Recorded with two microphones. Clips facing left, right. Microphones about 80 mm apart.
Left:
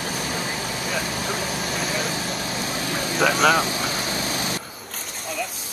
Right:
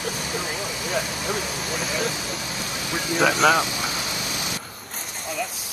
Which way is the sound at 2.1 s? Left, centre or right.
Left.